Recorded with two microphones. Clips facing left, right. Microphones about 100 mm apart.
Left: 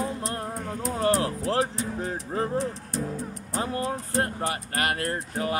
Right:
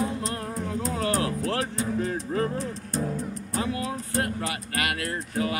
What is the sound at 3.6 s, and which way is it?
Vehicle, 35° left (ahead or behind).